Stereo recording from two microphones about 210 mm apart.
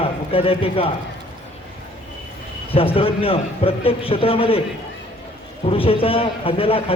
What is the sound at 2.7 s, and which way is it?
A man's voice, 25° left (ahead or behind).